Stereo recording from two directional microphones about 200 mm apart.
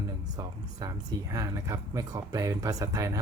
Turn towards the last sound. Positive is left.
turn(degrees=-15)  # may be behind; listen again after turning